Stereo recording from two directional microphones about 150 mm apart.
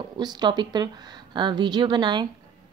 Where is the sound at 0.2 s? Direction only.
30° right (ahead or behind).